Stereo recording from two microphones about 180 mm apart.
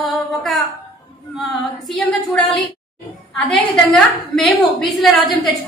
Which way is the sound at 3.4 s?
5° left (ahead or behind).